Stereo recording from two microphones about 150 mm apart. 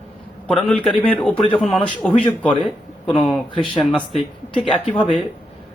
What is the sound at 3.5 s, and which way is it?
Speech, 35° left (ahead or behind).